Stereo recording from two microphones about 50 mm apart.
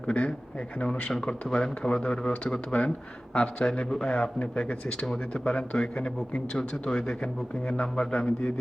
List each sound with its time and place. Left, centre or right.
0.1 s speech: left